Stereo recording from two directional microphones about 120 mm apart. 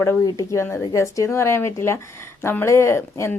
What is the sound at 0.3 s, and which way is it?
Speech, 25° left (ahead or behind).